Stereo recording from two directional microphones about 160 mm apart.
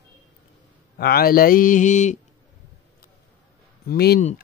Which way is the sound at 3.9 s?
90° left.